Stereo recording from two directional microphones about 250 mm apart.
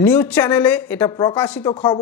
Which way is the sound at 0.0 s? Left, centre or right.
Centre.